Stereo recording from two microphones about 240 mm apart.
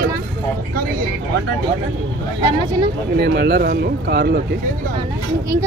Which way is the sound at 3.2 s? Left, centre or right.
Right.